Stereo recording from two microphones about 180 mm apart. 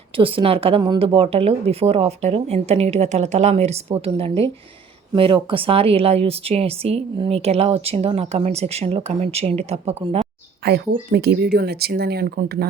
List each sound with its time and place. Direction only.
0.2 s speech: 30° right (ahead or behind)
10.6 s speech: 65° right (ahead or behind)